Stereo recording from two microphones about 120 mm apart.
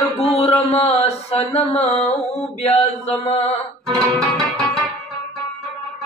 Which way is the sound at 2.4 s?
60° left (ahead or behind).